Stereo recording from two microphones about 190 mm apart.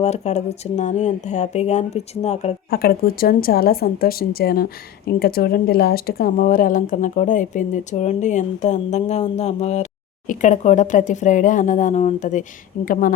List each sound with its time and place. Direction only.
0.0 s speech: 35° left (ahead or behind)
2.6 s speech: 55° left (ahead or behind)